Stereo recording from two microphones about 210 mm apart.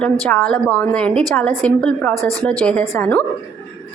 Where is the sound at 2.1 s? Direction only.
15° right (ahead or behind).